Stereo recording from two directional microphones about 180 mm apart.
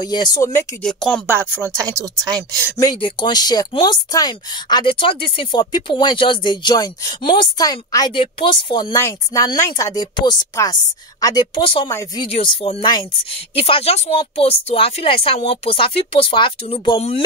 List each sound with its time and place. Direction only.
0.0 s speech: 25° left (ahead or behind)
0.8 s speech: 5° left (ahead or behind)
1.2 s speech: 10° right (ahead or behind)
2.8 s speech: 25° left (ahead or behind)
11.9 s speech: 15° left (ahead or behind)
12.3 s speech: 30° left (ahead or behind)